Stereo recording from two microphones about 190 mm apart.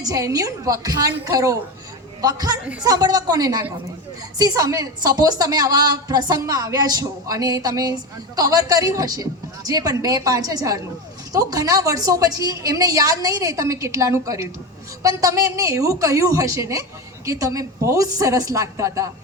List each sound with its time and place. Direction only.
0.0 s a woman's voice: 15° right (ahead or behind)